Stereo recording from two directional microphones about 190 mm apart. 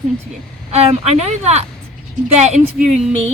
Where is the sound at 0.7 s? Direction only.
35° right (ahead or behind).